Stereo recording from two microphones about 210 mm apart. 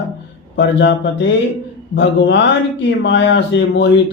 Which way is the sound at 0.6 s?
55° left (ahead or behind).